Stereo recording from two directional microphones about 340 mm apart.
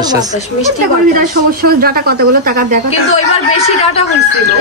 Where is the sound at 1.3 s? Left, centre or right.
Right.